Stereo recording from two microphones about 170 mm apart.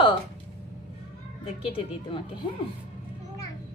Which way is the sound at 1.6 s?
35° left (ahead or behind).